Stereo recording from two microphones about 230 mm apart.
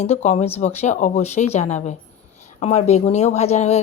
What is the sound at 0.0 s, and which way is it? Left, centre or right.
Speech, left.